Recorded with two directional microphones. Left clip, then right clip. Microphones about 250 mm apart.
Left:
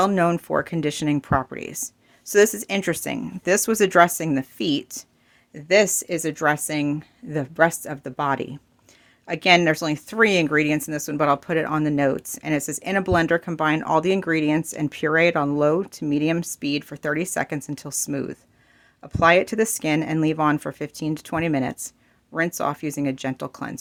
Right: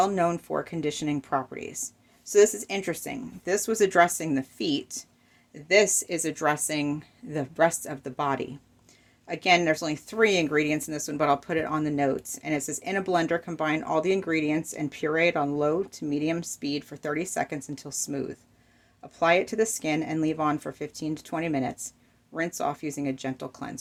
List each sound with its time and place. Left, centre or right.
0.0 s speech: left